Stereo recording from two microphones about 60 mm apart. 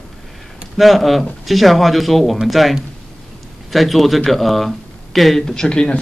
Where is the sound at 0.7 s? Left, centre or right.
Centre.